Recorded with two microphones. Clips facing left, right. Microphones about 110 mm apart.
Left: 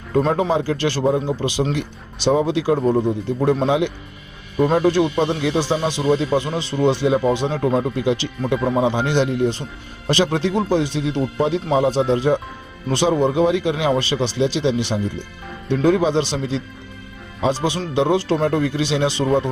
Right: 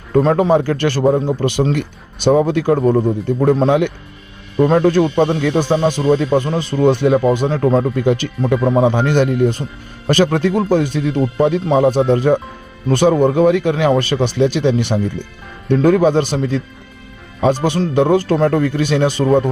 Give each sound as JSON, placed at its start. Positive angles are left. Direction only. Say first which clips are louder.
{"t": 0.1, "sound": "speech", "louder": "right 5 dB", "side_deg": -40}
{"t": 0.5, "sound": "a man's voice", "louder": "right 5 dB", "side_deg": -50}